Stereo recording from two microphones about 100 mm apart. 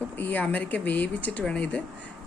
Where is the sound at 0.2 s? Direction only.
15° left (ahead or behind).